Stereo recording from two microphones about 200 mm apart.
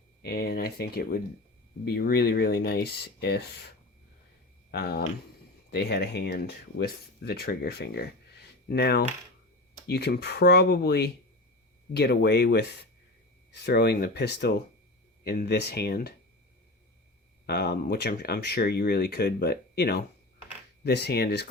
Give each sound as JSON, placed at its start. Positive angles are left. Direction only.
{"t": 0.2, "sound": "speech", "side_deg": 55}
{"t": 4.7, "sound": "speech", "side_deg": 50}
{"t": 17.4, "sound": "speech", "side_deg": 55}